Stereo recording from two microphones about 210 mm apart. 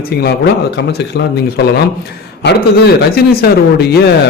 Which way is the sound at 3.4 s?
50° left (ahead or behind).